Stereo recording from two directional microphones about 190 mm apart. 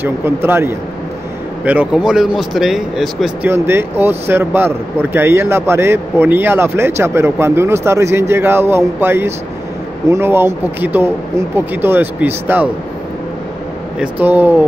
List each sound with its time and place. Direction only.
0.0 s speech: 10° right (ahead or behind)
3.4 s speech: 10° right (ahead or behind)
13.9 s speech: 10° right (ahead or behind)